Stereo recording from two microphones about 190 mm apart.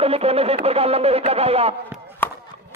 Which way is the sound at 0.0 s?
30° right (ahead or behind).